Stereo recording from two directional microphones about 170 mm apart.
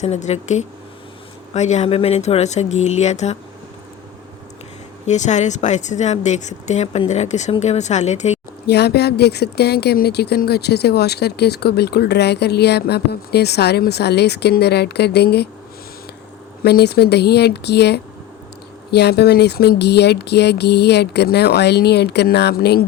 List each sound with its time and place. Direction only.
0.0 s speech: 40° left (ahead or behind)
5.0 s speech: 45° left (ahead or behind)
8.6 s speech: 75° left (ahead or behind)
16.6 s speech: 75° left (ahead or behind)